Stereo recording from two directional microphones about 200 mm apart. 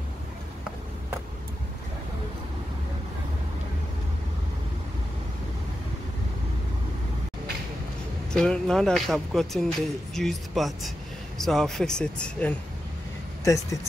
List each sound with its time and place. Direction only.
8.3 s speech: 5° left (ahead or behind)